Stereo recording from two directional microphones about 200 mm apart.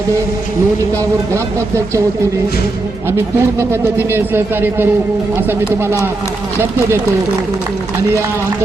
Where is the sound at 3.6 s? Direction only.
10° right (ahead or behind).